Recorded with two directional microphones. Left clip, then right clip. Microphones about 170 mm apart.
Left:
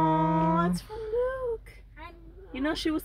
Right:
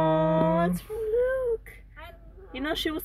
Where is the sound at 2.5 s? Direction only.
15° left (ahead or behind).